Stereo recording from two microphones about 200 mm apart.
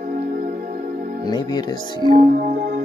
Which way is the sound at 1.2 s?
20° left (ahead or behind).